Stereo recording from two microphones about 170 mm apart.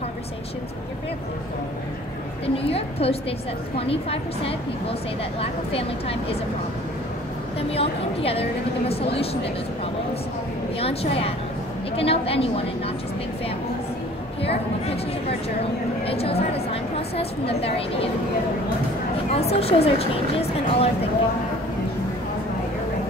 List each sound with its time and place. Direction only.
2.4 s a woman's voice: 35° left (ahead or behind)
7.7 s a woman's voice: 35° left (ahead or behind)
10.8 s a woman's voice: 35° left (ahead or behind)
16.1 s a sound: 35° left (ahead or behind)
17.6 s a woman's voice: 35° left (ahead or behind)
19.3 s a woman's voice: 35° left (ahead or behind)